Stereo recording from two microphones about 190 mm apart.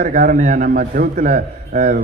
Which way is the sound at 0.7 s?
55° right (ahead or behind).